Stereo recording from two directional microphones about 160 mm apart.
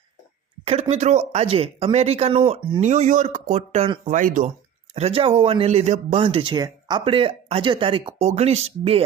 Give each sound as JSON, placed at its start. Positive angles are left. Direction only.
{"t": 0.6, "sound": "speech", "side_deg": -40}
{"t": 2.8, "sound": "speech", "side_deg": -50}
{"t": 4.0, "sound": "speech", "side_deg": -55}
{"t": 4.9, "sound": "speech", "side_deg": -40}